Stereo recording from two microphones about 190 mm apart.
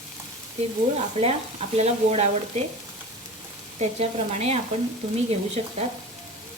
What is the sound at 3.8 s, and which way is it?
Speech, 35° right (ahead or behind).